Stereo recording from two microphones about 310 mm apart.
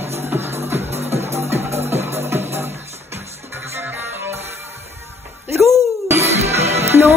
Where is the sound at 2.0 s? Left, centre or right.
Centre.